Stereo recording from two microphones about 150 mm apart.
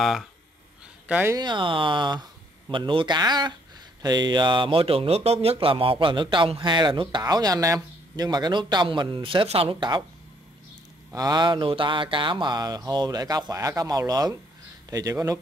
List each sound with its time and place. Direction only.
0.0 s speech: centre (ahead or behind)
1.3 s speech: 30° right (ahead or behind)
11.1 s speech: 30° right (ahead or behind)